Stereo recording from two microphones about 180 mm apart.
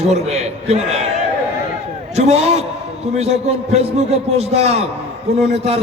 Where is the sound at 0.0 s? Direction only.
35° right (ahead or behind).